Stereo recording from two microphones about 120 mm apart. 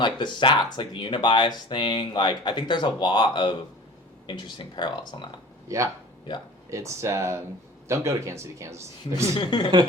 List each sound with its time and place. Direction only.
0.0 s speech: 40° left (ahead or behind)
5.6 s speech: 25° right (ahead or behind)
6.3 s speech: 40° left (ahead or behind)
6.7 s a man's voice: 25° right (ahead or behind)
9.3 s speech: 40° left (ahead or behind)